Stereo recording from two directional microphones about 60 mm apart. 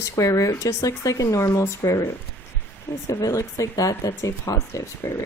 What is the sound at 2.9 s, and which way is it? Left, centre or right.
Speech, left.